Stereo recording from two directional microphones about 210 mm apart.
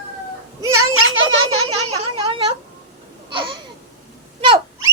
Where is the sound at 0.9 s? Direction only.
70° right (ahead or behind).